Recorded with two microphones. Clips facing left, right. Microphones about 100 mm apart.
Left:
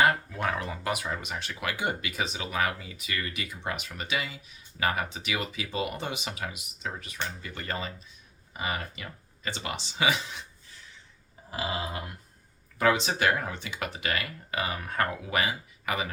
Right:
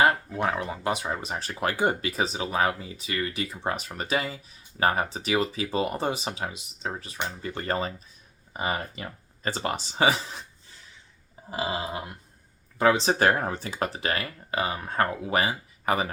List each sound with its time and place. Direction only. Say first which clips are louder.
0.0 s speech: right 2 dB; 25° right (ahead or behind)
11.5 s a sound: right 3 dB; 30° right (ahead or behind)
12.8 s speech: right 4 dB; 30° right (ahead or behind)